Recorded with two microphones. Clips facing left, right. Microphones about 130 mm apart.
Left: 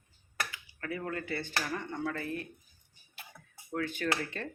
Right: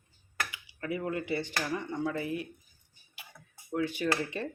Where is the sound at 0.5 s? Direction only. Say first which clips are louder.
Right 3 dB; 15° right (ahead or behind).